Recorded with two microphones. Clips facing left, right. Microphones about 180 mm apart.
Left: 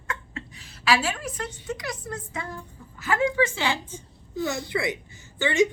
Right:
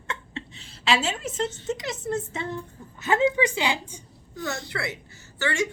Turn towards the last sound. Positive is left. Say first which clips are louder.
# left 5 dB
turn(degrees=20)  # may be behind; listen again after turning